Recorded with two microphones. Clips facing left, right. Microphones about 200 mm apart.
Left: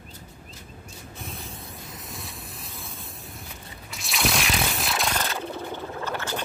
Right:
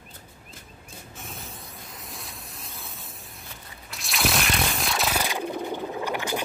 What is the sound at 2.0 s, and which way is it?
Vehicle, centre (ahead or behind).